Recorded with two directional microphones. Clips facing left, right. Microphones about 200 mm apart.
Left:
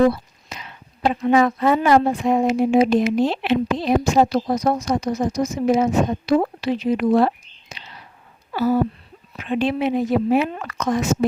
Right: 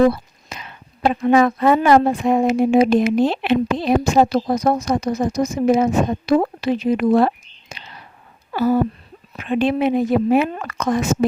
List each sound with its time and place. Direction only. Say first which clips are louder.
0.5 s a woman's voice: right 1 dB; 55° right (ahead or behind)
7.7 s whispering: right 2 dB; 50° right (ahead or behind)
8.5 s a woman's voice: right 2 dB; 50° right (ahead or behind)